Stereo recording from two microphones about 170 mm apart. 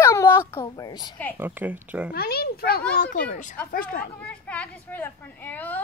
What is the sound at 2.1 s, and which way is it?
A child's voice, 65° left (ahead or behind).